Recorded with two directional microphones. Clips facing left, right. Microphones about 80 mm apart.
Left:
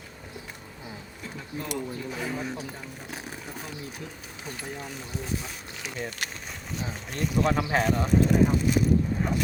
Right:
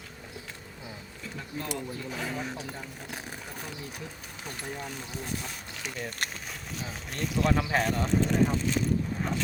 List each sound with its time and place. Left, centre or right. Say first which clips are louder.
1.5 s speech: left 3 dB; centre
3.1 s vehicle: left 2 dB; centre
4.4 s speech: even; centre